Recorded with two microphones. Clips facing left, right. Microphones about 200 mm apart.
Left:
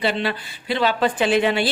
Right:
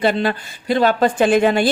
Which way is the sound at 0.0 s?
45° right (ahead or behind).